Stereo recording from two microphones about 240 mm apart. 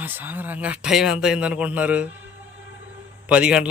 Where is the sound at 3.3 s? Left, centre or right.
Centre.